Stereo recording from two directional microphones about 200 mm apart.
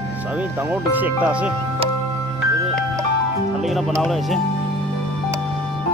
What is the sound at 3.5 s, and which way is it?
Speech, centre (ahead or behind).